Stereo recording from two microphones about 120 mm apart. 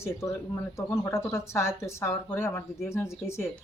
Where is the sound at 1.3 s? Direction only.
20° left (ahead or behind).